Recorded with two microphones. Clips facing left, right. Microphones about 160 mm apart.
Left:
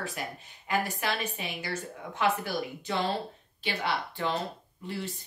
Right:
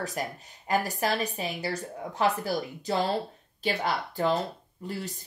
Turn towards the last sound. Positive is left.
turn(degrees=-40)  # may be behind; listen again after turning